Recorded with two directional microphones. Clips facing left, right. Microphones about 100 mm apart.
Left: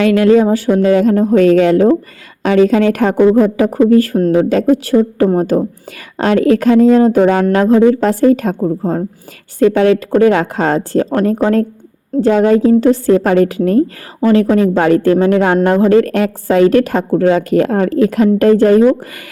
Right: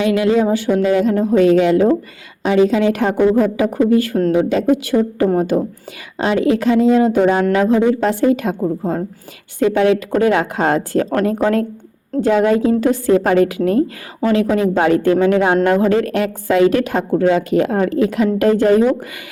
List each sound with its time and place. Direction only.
0.0 s speech: 50° left (ahead or behind)
0.4 s speech: 40° left (ahead or behind)
3.2 s a woman's voice: 35° left (ahead or behind)
6.1 s a woman's voice: 50° left (ahead or behind)